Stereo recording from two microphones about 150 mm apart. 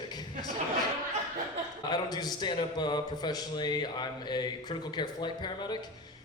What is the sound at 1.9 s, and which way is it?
A man's voice, 30° left (ahead or behind).